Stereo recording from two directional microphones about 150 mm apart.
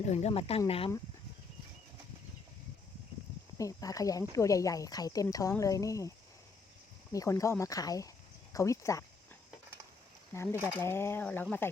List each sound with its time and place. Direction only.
0.0 s speech: 45° left (ahead or behind)
3.6 s speech: 25° left (ahead or behind)
7.1 s speech: 20° left (ahead or behind)
10.3 s speech: 15° left (ahead or behind)